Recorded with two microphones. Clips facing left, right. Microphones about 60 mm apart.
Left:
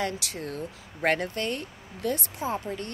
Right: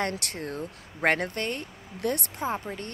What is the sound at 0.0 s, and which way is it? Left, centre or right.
Speech, right.